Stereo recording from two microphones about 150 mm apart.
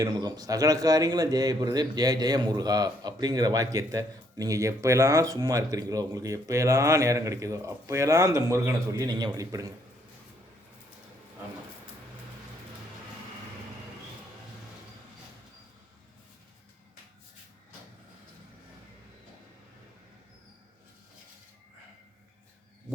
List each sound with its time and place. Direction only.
0.0 s a man's voice: 25° right (ahead or behind)